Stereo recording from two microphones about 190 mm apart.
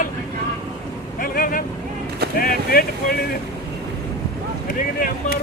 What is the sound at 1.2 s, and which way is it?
Vehicle, 45° left (ahead or behind).